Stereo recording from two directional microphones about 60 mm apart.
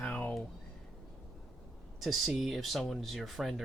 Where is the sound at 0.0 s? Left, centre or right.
Left.